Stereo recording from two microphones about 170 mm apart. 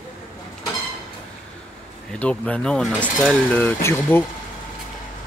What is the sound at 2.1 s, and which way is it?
Speech, 5° left (ahead or behind).